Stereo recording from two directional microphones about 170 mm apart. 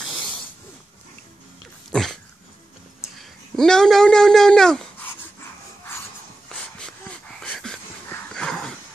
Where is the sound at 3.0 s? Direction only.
Centre (ahead or behind).